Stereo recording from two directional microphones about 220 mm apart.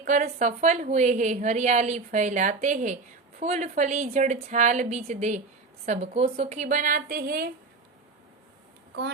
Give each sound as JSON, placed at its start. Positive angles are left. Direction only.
{"t": 0.0, "sound": "a woman's voice", "side_deg": -35}